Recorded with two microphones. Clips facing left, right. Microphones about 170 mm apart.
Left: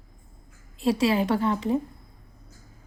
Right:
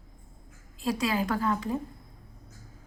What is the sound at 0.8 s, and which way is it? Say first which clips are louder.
Speech: left 6 dB; 30° left (ahead or behind).